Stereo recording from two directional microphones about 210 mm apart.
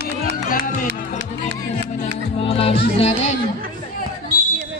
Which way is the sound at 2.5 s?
25° left (ahead or behind).